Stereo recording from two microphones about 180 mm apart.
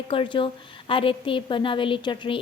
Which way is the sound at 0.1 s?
30° left (ahead or behind).